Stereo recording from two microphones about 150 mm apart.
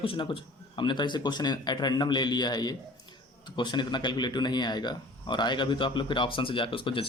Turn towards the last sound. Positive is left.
turn(degrees=35)  # may be behind; listen again after turning